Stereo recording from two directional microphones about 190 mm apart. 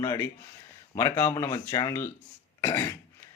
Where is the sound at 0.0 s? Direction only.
15° left (ahead or behind).